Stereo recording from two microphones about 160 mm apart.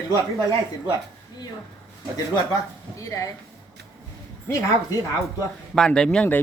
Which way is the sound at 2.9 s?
20° left (ahead or behind).